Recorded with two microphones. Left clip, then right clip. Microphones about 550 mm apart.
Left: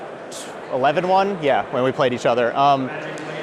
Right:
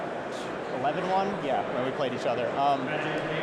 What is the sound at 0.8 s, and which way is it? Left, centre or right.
A man's voice, left.